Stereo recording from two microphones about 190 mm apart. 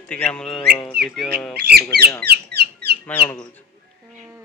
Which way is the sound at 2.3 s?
60° right (ahead or behind).